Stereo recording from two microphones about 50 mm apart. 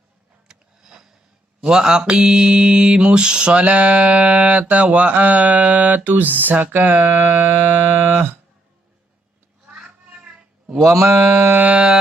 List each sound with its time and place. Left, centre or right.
0.4 s a sound: centre
1.6 s mantra: centre; by 8.3 s right
9.7 s cat: centre
10.8 s mantra: right